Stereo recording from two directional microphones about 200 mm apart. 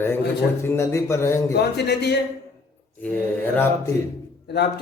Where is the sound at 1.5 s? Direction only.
55° left (ahead or behind).